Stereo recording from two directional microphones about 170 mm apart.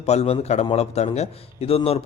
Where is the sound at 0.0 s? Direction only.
40° left (ahead or behind).